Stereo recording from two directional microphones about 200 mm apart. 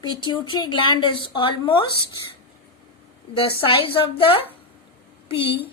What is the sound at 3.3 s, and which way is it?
A woman's voice, 25° left (ahead or behind).